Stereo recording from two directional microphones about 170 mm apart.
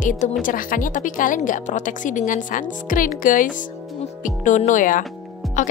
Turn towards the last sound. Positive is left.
turn(degrees=50)  # may be behind; listen again after turning